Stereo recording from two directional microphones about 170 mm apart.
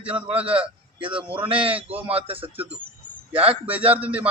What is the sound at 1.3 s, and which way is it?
Speech, 30° right (ahead or behind).